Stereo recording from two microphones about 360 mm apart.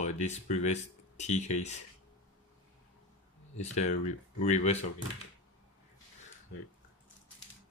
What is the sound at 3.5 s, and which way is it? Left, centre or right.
Speech, centre.